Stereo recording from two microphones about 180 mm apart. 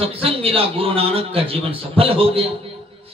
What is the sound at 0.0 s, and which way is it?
A man's voice, 30° right (ahead or behind).